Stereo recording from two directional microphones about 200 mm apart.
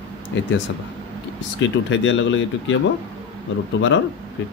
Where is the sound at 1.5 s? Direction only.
70° left (ahead or behind).